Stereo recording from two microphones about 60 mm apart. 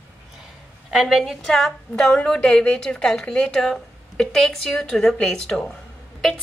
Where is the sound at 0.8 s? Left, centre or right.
Centre.